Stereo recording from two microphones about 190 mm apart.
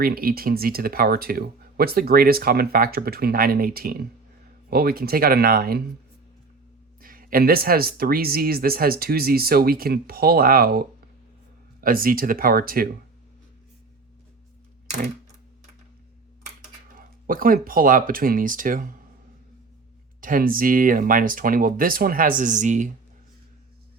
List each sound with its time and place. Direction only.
0.0 s speech: 50° right (ahead or behind)
7.0 s speech: 50° right (ahead or behind)
17.0 s speech: 50° right (ahead or behind)
20.2 s speech: 45° right (ahead or behind)